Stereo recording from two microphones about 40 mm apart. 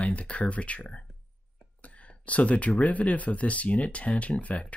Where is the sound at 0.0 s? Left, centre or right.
Left.